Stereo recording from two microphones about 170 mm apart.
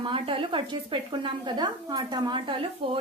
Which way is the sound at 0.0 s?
30° right (ahead or behind).